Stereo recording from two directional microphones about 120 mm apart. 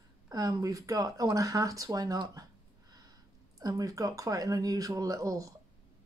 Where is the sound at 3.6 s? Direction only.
30° right (ahead or behind).